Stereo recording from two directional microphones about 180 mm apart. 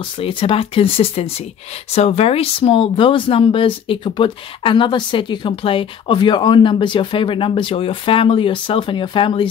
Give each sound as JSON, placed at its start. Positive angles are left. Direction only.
{"t": 0.2, "sound": "speech", "side_deg": 30}